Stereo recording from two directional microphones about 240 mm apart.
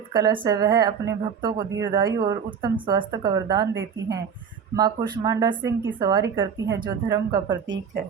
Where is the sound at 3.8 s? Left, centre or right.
Right.